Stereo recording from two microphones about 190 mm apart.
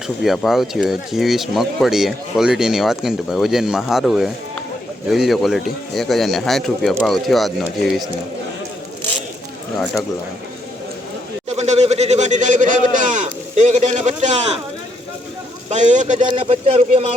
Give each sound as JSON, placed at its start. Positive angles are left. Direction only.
{"t": 0.2, "sound": "speech", "side_deg": 0}
{"t": 11.4, "sound": "speech", "side_deg": -35}
{"t": 15.7, "sound": "a man's voice", "side_deg": -40}
{"t": 16.2, "sound": "speech", "side_deg": -30}